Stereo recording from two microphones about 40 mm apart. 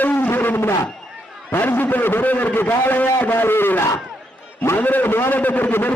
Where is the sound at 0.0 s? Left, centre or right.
Left.